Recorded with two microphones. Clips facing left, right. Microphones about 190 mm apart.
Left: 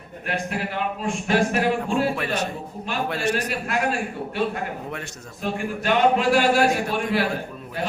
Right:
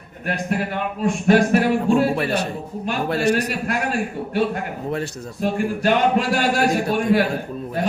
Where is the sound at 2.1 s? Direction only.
35° right (ahead or behind).